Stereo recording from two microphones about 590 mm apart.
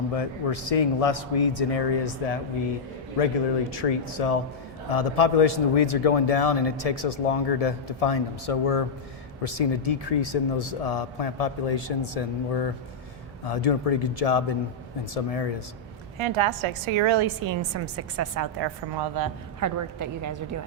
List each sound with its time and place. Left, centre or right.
0.1 s a man's voice: left
16.1 s a woman's voice: right
18.6 s a woman's voice: right